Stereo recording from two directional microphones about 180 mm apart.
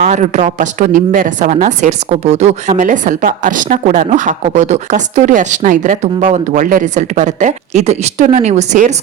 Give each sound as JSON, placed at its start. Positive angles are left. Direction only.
{"t": 0.0, "sound": "a woman's voice", "side_deg": -40}